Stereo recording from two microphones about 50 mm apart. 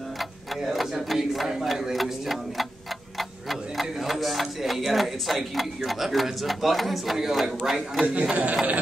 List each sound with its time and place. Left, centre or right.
0.2 s speech: centre
8.1 s speech: right